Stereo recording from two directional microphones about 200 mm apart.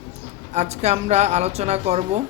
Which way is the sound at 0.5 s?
35° right (ahead or behind).